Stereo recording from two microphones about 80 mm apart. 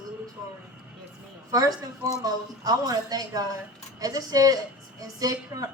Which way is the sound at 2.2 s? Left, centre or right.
Right.